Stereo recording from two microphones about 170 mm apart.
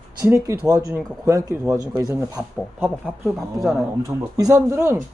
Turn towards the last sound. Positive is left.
turn(degrees=-15)  # may be behind; listen again after turning